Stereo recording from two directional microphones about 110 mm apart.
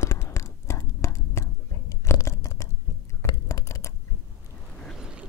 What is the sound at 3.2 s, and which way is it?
Typing, 30° left (ahead or behind).